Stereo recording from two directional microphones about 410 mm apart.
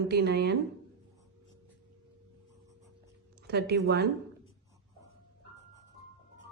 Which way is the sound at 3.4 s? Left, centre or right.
Right.